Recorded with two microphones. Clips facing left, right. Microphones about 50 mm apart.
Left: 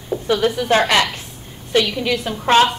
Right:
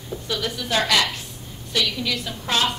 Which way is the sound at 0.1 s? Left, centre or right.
Left.